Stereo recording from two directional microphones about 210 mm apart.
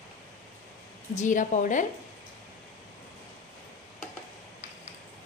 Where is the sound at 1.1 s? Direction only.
35° left (ahead or behind).